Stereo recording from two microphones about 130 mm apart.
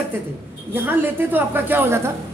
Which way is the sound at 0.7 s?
15° right (ahead or behind).